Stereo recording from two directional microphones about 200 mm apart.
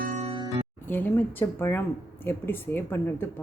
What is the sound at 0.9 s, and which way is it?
Speech, 10° left (ahead or behind).